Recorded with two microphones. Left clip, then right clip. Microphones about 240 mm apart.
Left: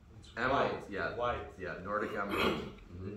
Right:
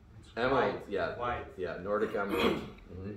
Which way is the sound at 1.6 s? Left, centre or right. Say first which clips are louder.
Right 4 dB; right.